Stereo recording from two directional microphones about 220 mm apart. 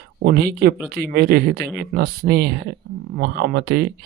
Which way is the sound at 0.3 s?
45° right (ahead or behind).